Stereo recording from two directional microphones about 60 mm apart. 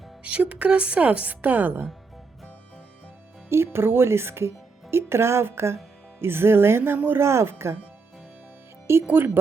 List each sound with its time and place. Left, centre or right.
0.2 s speech: right
3.5 s speech: right
8.9 s speech: right